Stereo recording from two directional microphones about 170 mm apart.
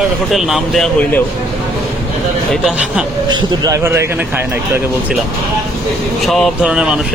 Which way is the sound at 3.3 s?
20° right (ahead or behind).